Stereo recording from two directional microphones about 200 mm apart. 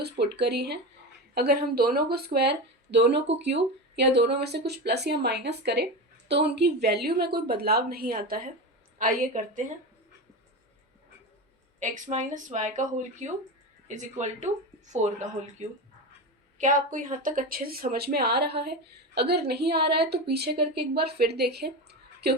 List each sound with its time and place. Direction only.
0.0 s speech: 55° right (ahead or behind); by 9.7 s 40° right (ahead or behind)
11.8 s speech: 40° right (ahead or behind); by 22.4 s 55° right (ahead or behind)